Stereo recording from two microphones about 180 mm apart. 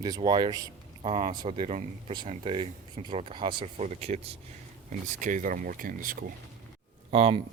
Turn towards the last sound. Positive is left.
turn(degrees=-35)  # may be behind; listen again after turning